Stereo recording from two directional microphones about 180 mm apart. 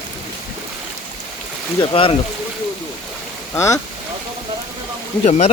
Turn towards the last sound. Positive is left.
turn(degrees=40)  # may be behind; listen again after turning